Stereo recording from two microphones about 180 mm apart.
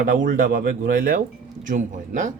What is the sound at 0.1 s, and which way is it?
Speech, 50° right (ahead or behind).